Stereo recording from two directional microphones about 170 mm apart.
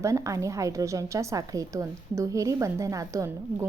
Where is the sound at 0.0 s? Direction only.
20° right (ahead or behind).